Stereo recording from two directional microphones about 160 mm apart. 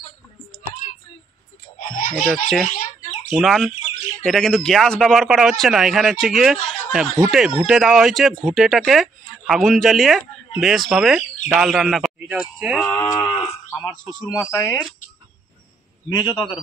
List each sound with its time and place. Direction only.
1.8 s a sound: 55° left (ahead or behind)
2.1 s speech: centre (ahead or behind)
13.2 s speech: 15° left (ahead or behind)
16.2 s a man's voice: 30° left (ahead or behind)